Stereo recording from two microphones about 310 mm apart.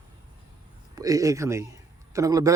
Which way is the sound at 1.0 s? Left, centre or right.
Centre.